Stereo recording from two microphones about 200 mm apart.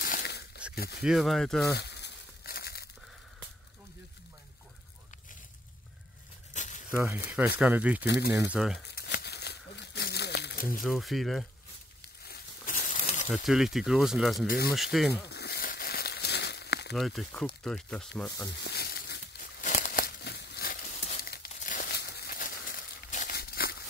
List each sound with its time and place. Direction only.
0.0 s a sound: 50° left (ahead or behind)
0.7 s speech: 55° left (ahead or behind)
1.0 s speech: centre (ahead or behind)
1.7 s crumpling: 55° left (ahead or behind)
6.5 s a sound: 35° left (ahead or behind)
7.2 s speech: 5° right (ahead or behind)
8.8 s crumpling: 55° left (ahead or behind)
10.8 s speech: centre (ahead or behind)
12.3 s a sound: 45° left (ahead or behind)
13.3 s speech: centre (ahead or behind)
15.2 s crumpling: 55° left (ahead or behind)
16.9 s speech: centre (ahead or behind)
18.6 s a sound: 55° left (ahead or behind)
19.6 s crumpling: 40° left (ahead or behind)